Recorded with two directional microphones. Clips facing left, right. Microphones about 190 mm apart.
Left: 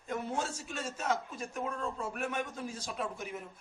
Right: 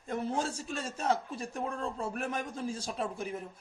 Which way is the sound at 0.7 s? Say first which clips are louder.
Right 3 dB; 35° right (ahead or behind).